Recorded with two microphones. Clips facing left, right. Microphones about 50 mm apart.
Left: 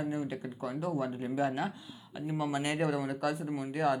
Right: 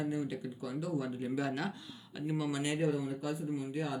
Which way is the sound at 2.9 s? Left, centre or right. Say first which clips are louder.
Left 3 dB; left.